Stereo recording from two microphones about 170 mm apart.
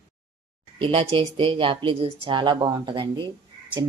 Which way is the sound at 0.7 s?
30° right (ahead or behind).